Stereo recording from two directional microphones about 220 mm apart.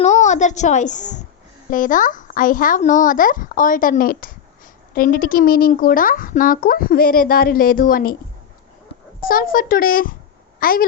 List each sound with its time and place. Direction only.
0.0 s a woman's voice: 30° left (ahead or behind)
9.2 s a woman's voice: 40° left (ahead or behind)